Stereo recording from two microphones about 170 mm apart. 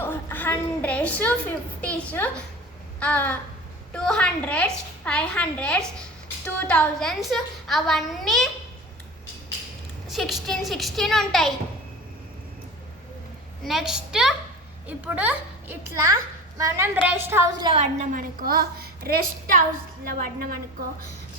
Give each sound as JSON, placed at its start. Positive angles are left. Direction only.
{"t": 0.0, "sound": "a woman's voice", "side_deg": 15}
{"t": 10.1, "sound": "a woman's voice", "side_deg": 0}
{"t": 13.7, "sound": "a woman's voice", "side_deg": 0}
{"t": 17.7, "sound": "a woman's voice", "side_deg": -50}